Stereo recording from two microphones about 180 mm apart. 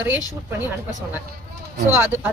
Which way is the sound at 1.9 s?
10° right (ahead or behind).